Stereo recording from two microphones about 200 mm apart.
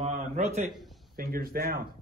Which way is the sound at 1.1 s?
50° right (ahead or behind).